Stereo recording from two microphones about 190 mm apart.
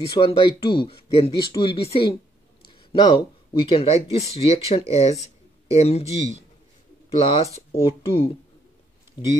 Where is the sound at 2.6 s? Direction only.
25° left (ahead or behind).